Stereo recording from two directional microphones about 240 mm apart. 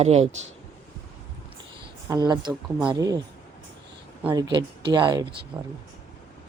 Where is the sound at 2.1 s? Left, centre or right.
Centre.